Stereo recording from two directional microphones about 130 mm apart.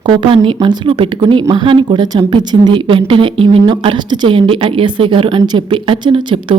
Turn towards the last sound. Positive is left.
turn(degrees=-40)  # may be behind; listen again after turning